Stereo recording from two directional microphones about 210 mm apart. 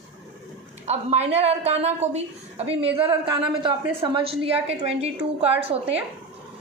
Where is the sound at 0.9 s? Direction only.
30° right (ahead or behind).